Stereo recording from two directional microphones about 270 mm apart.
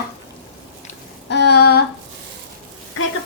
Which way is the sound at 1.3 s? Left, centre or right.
Left.